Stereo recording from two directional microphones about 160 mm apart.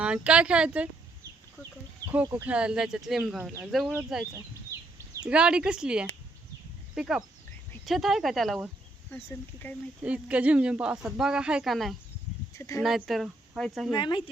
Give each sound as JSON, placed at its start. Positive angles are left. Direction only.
{"t": 0.0, "sound": "speech", "side_deg": -5}
{"t": 2.0, "sound": "a sound", "side_deg": -25}
{"t": 2.4, "sound": "speech", "side_deg": -5}
{"t": 9.1, "sound": "speech", "side_deg": 15}
{"t": 10.0, "sound": "speech", "side_deg": -10}
{"t": 12.5, "sound": "speech", "side_deg": 20}
{"t": 12.8, "sound": "speech", "side_deg": 0}
{"t": 13.9, "sound": "speech", "side_deg": 30}